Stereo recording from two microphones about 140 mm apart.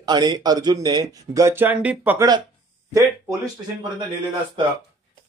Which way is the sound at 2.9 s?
30° right (ahead or behind).